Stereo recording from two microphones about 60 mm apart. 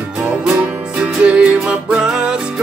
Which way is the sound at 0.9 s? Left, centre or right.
Centre.